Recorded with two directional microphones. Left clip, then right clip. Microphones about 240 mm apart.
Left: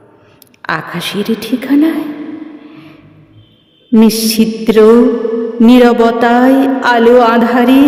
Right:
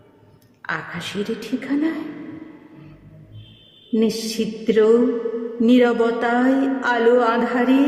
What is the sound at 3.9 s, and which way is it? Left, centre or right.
A woman's voice, left.